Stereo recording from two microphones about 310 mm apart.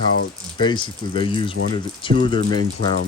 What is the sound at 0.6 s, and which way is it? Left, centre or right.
Speech, centre.